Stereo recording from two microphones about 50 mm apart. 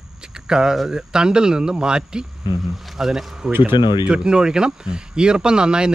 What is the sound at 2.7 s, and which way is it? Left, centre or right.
Speech, centre.